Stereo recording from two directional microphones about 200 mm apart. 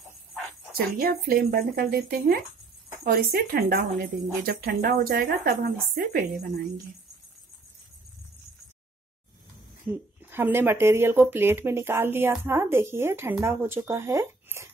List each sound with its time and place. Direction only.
0.7 s speech: 50° right (ahead or behind)
9.8 s speech: 10° right (ahead or behind)